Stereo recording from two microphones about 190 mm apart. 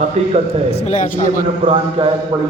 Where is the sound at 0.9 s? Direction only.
40° left (ahead or behind).